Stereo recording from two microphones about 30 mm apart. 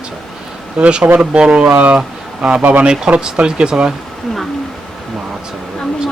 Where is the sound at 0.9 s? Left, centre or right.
Right.